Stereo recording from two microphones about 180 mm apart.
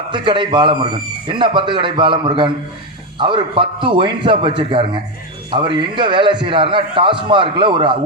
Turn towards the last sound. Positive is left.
turn(degrees=-30)  # may be behind; listen again after turning